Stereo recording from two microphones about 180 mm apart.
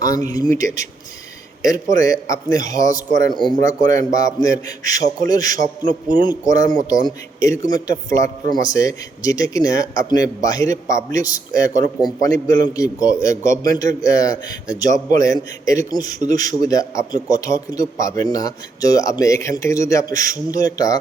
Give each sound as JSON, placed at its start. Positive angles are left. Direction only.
{"t": 0.0, "sound": "a man's voice", "side_deg": 20}
{"t": 2.0, "sound": "a man's voice", "side_deg": 20}